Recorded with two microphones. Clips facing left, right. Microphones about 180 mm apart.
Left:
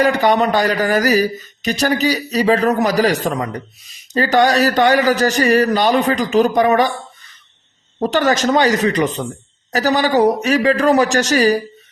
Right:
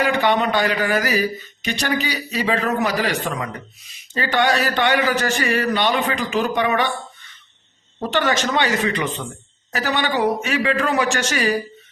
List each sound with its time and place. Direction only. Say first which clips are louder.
0.0 s speech: left 4 dB; 40° left (ahead or behind)
7.9 s speech: left 5 dB; 40° left (ahead or behind)